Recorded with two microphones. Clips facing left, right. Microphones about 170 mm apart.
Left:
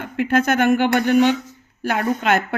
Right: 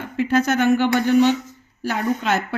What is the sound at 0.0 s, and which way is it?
A woman's voice, 55° left (ahead or behind).